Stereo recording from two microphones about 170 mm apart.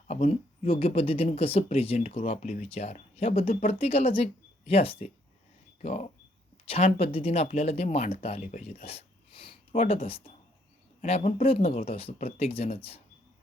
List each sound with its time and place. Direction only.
0.1 s speech: 35° left (ahead or behind)